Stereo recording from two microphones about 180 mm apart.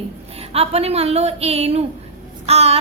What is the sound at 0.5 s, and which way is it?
A woman's voice, 35° right (ahead or behind).